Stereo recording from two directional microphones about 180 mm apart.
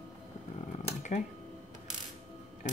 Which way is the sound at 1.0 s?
40° left (ahead or behind).